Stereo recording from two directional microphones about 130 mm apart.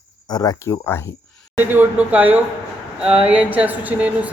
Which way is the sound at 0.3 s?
35° left (ahead or behind).